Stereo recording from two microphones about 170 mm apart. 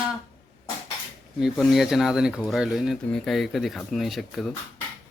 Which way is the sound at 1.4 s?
5° right (ahead or behind).